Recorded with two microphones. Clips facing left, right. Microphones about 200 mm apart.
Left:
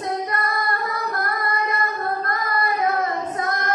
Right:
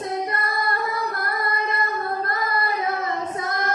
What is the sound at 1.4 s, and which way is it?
Child singing, 25° right (ahead or behind).